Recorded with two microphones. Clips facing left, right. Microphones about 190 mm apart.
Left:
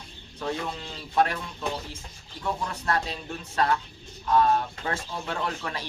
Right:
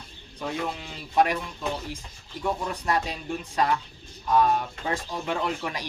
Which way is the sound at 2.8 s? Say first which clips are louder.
Right 1 dB; 15° right (ahead or behind).